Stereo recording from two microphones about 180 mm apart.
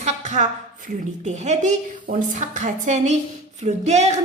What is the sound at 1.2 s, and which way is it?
A woman's voice, 40° right (ahead or behind).